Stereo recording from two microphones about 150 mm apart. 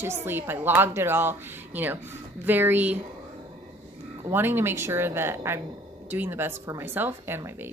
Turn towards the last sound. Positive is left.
turn(degrees=-15)  # may be behind; listen again after turning